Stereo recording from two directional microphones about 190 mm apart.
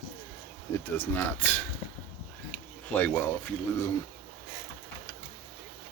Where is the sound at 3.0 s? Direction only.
10° left (ahead or behind).